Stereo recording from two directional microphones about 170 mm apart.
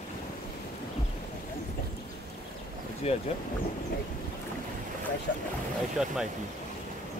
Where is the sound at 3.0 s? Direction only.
35° left (ahead or behind).